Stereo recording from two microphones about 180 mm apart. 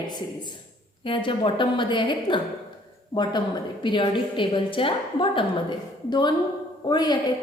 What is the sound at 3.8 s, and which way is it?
A woman's voice, 25° left (ahead or behind).